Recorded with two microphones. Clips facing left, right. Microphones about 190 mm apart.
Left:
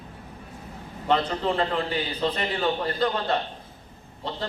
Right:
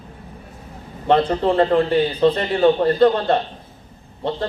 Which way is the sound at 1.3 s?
50° right (ahead or behind).